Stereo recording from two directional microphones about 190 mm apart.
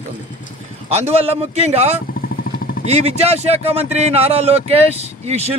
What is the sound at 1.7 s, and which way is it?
A man's voice, 35° right (ahead or behind).